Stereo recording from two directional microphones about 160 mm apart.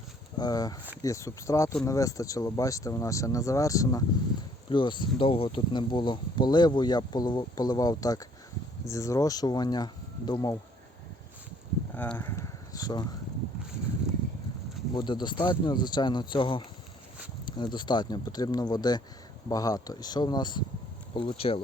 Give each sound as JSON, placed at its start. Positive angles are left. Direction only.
{"t": 0.3, "sound": "speech", "side_deg": 25}
{"t": 11.9, "sound": "speech", "side_deg": 15}
{"t": 14.9, "sound": "speech", "side_deg": 30}